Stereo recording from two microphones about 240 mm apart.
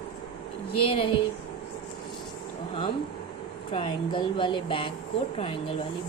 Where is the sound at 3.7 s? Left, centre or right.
Left.